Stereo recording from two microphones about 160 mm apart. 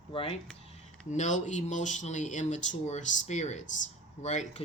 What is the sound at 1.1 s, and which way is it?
Speech, 50° left (ahead or behind).